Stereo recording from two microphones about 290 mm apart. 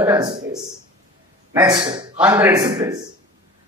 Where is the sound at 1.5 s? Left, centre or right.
Centre.